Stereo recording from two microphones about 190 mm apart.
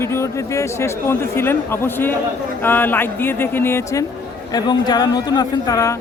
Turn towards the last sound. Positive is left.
turn(degrees=15)  # may be behind; listen again after turning